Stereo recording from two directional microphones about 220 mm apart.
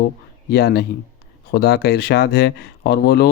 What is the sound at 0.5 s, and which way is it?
Speech, 45° left (ahead or behind).